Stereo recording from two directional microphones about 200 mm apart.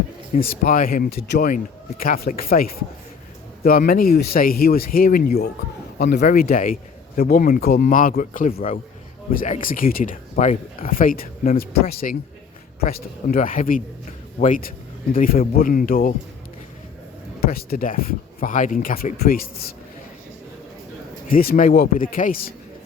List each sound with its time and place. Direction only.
0.3 s speech: 45° left (ahead or behind)
17.4 s speech: 50° left (ahead or behind)
21.2 s speech: 45° left (ahead or behind)